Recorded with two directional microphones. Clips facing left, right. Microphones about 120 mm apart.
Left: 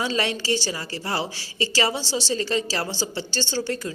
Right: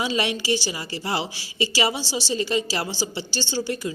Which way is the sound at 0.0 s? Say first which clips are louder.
Right 1 dB; 15° right (ahead or behind).